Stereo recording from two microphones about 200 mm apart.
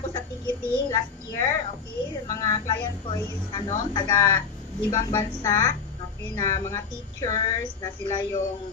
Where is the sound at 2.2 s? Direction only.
15° left (ahead or behind).